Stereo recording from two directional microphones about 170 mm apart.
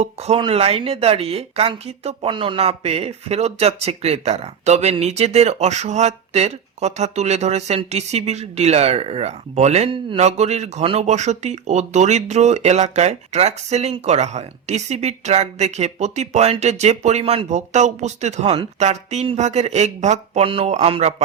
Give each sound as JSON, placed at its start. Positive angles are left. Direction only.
{"t": 0.0, "sound": "speech", "side_deg": -40}